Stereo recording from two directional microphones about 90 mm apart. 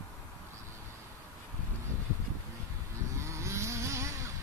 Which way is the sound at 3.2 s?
30° right (ahead or behind).